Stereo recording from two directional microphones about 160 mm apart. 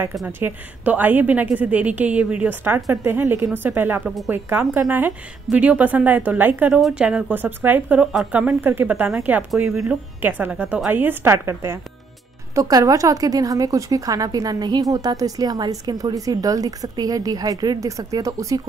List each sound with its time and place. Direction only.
0.4 s a woman's voice: 10° right (ahead or behind)